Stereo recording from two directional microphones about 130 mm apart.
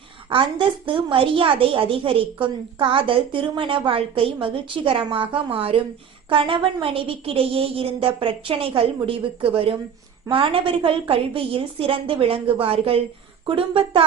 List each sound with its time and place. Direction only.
0.9 s a woman's voice: 45° right (ahead or behind)